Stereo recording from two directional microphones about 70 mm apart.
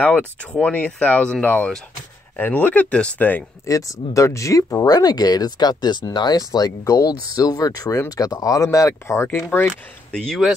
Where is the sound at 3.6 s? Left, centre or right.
Left.